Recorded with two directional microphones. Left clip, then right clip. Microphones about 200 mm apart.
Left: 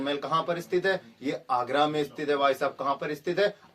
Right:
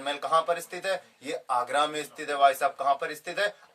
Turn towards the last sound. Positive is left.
turn(degrees=-15)  # may be behind; listen again after turning